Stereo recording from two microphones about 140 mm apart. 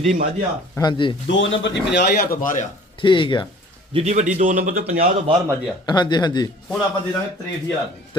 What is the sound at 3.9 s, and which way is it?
A man's voice, 50° right (ahead or behind).